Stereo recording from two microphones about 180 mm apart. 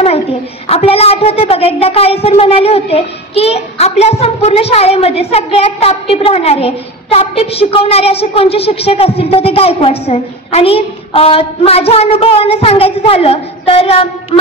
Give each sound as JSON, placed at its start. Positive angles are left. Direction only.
{"t": 0.7, "sound": "a child's voice", "side_deg": 35}